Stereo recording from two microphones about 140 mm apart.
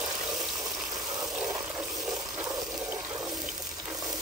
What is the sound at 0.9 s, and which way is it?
Water, 25° right (ahead or behind).